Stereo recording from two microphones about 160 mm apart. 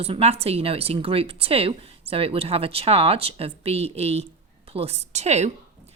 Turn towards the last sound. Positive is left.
turn(degrees=-45)  # may be behind; listen again after turning